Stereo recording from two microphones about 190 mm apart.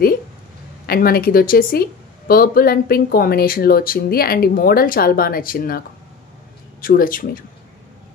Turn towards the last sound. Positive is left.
turn(degrees=50)  # may be behind; listen again after turning